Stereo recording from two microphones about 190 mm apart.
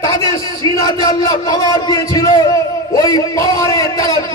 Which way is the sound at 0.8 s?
20° left (ahead or behind).